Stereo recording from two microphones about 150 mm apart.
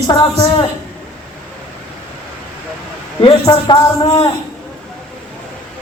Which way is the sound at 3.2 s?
30° left (ahead or behind).